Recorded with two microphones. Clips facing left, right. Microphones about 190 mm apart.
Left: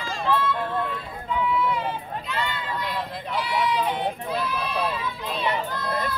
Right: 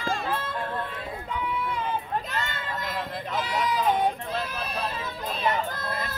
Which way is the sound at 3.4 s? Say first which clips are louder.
Left 3 dB; 45° right (ahead or behind).